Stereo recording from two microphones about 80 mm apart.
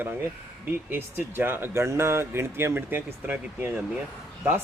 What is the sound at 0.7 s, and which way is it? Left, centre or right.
A man's voice, right.